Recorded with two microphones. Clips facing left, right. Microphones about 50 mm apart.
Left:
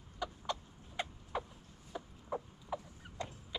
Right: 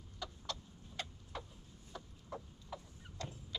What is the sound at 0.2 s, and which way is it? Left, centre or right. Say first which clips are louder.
Chicken: left 6 dB; left.